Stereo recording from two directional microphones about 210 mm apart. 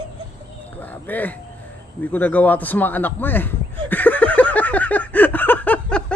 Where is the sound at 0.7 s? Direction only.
10° left (ahead or behind).